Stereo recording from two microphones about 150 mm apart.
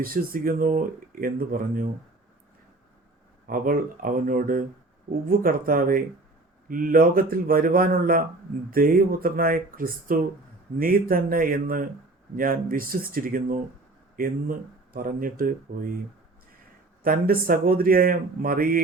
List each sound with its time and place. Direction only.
0.0 s speech: 75° right (ahead or behind)
3.4 s speech: 70° right (ahead or behind)
17.0 s speech: 75° right (ahead or behind)